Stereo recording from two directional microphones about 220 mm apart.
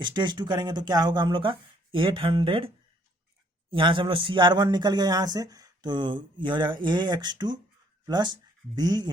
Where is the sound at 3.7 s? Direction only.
20° right (ahead or behind).